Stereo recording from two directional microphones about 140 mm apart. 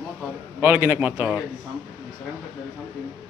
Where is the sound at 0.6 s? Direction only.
15° right (ahead or behind).